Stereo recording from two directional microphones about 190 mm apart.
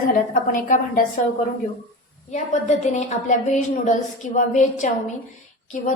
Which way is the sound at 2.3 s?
40° left (ahead or behind).